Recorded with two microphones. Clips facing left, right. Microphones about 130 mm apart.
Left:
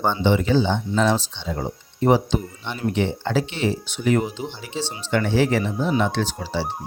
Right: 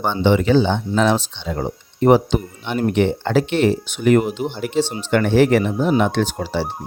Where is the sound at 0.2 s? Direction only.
70° right (ahead or behind); by 6.7 s 55° right (ahead or behind).